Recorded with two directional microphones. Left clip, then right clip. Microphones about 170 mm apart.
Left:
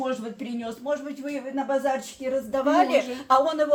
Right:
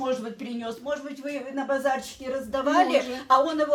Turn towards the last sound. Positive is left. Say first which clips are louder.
# left 1 dB
turn(degrees=0)  # may be behind; listen again after turning